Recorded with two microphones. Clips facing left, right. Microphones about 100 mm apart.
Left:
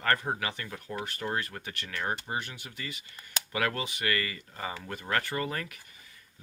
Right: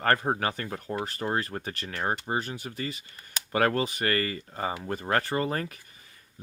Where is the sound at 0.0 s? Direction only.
40° right (ahead or behind).